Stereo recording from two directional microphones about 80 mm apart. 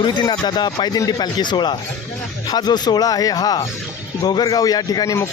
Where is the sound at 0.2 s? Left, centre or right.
Left.